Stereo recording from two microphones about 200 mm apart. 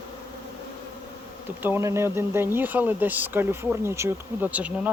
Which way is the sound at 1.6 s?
10° right (ahead or behind).